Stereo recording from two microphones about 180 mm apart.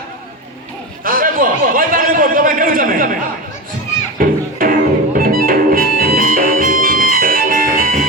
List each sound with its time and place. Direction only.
1.0 s a man's voice: 50° right (ahead or behind)
4.2 s music: 50° right (ahead or behind)